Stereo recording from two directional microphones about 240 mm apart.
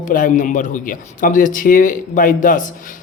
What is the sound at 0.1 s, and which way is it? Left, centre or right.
Speech, left.